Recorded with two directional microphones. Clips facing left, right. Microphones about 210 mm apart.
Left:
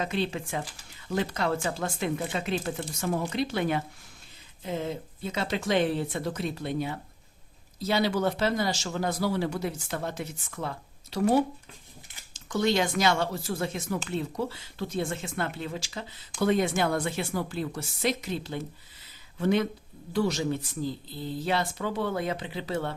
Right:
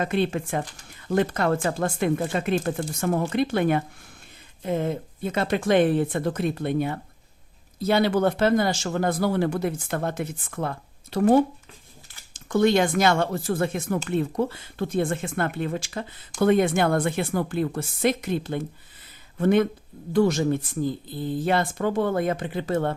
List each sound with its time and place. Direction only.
0.0 s speech: 55° right (ahead or behind)